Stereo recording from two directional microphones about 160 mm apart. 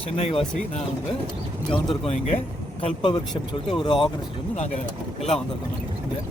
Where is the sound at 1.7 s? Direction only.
30° left (ahead or behind).